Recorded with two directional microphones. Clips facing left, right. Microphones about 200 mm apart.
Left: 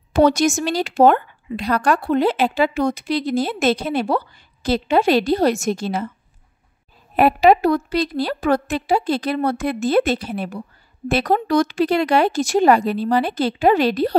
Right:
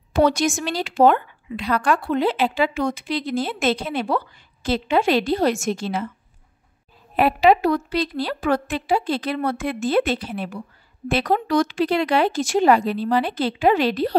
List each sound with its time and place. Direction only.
0.1 s speech: 45° left (ahead or behind)
7.2 s speech: 45° left (ahead or behind)